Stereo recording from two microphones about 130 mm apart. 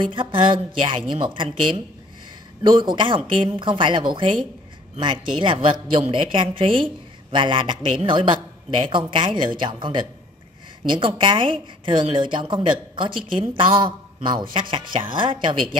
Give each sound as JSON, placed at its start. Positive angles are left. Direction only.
{"t": 0.1, "sound": "a man's voice", "side_deg": -40}
{"t": 2.6, "sound": "a man's voice", "side_deg": -35}